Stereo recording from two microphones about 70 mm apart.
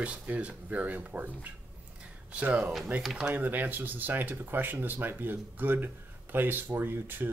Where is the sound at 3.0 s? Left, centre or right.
Centre.